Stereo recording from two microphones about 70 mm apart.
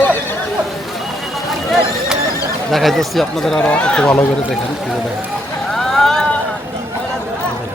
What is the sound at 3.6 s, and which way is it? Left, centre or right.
Speech, centre.